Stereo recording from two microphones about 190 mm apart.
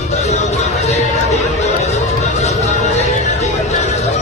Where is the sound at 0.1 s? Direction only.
35° left (ahead or behind).